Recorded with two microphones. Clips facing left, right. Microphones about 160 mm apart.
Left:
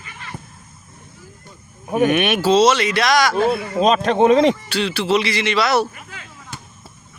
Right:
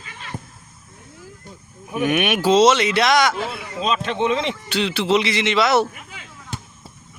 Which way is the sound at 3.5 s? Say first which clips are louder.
Left 7 dB; 45° left (ahead or behind).